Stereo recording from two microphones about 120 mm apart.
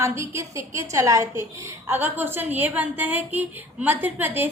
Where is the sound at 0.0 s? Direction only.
25° right (ahead or behind).